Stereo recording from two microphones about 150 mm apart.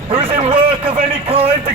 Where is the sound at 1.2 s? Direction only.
40° right (ahead or behind).